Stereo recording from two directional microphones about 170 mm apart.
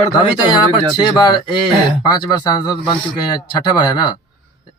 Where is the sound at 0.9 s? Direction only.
25° left (ahead or behind).